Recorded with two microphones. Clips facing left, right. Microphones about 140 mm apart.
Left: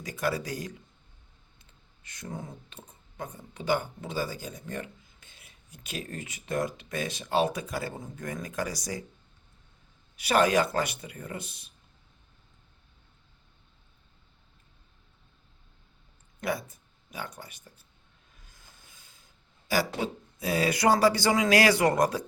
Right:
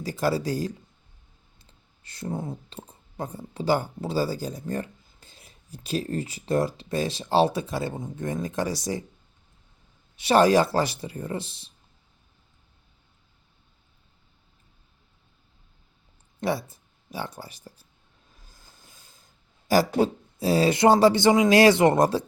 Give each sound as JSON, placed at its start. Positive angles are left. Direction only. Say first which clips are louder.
{"t": 0.0, "sound": "speech", "louder": "right 5 dB", "side_deg": -30}
{"t": 2.0, "sound": "speech", "louder": "right 8 dB", "side_deg": -30}
{"t": 10.2, "sound": "speech", "louder": "right 5 dB", "side_deg": -30}
{"t": 16.4, "sound": "speech", "louder": "right 4 dB", "side_deg": -30}
{"t": 18.4, "sound": "a sound", "louder": "right 2 dB", "side_deg": -35}
{"t": 19.6, "sound": "speech", "louder": "right 8 dB", "side_deg": -40}